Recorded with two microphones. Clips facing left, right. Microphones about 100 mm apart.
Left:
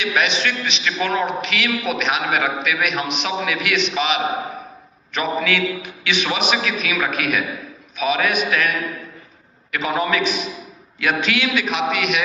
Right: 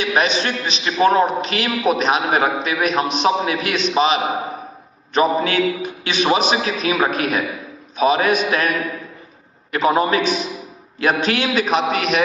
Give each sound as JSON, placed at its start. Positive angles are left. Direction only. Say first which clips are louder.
{"t": 0.0, "sound": "a man's voice", "louder": "right 2 dB", "side_deg": -35}
{"t": 9.7, "sound": "a man's voice", "louder": "right 4 dB", "side_deg": -35}